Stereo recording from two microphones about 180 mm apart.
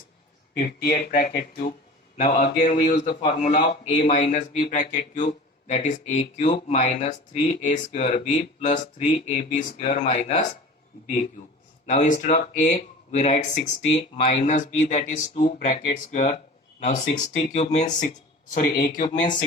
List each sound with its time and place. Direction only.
0.6 s speech: 55° left (ahead or behind)
2.4 s a man's voice: 45° left (ahead or behind)
11.9 s a man's voice: 40° left (ahead or behind)